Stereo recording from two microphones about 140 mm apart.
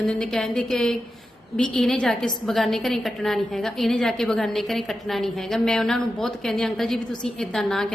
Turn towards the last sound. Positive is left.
turn(degrees=0)  # may be behind; listen again after turning